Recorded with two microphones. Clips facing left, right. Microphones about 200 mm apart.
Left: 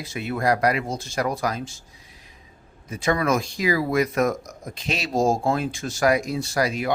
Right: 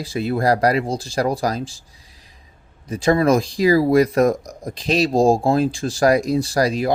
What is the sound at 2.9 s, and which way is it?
Speech, 35° right (ahead or behind).